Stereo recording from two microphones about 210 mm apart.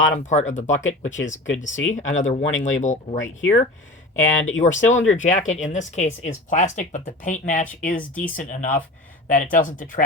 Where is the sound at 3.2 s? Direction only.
65° left (ahead or behind).